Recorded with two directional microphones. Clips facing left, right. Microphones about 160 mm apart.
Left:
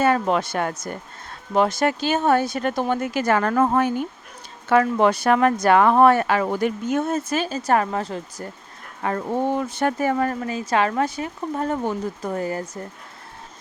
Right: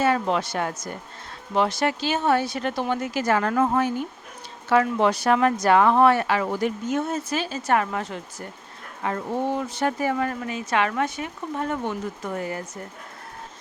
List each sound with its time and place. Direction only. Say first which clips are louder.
0.0 s speech: left 3 dB; 50° left (ahead or behind)
9.0 s speech: left 3 dB; 50° left (ahead or behind)